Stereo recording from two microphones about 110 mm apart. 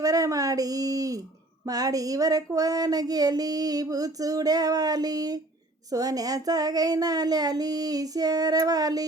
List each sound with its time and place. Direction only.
0.0 s speech: 30° right (ahead or behind)
1.6 s child singing: 35° right (ahead or behind)